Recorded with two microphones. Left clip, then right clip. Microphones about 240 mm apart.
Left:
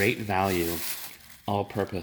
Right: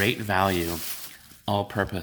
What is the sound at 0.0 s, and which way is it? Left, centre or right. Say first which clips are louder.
Speech: right 2 dB; centre.